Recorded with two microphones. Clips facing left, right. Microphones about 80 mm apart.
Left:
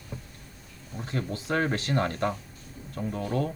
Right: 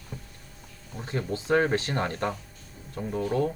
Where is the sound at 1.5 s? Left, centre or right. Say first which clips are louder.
Right 3 dB; right.